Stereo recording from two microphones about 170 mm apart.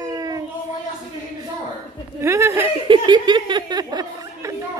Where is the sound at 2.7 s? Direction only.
30° right (ahead or behind).